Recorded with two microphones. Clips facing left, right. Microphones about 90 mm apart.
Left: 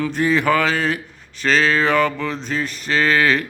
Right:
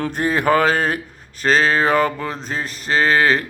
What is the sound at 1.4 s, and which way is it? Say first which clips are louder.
Mantra: right 1 dB; 40° right (ahead or behind).